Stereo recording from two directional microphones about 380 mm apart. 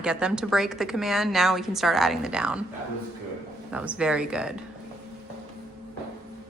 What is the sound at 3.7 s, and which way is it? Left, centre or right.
Speech, centre.